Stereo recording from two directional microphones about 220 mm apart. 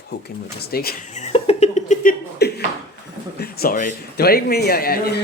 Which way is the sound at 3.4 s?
45° left (ahead or behind).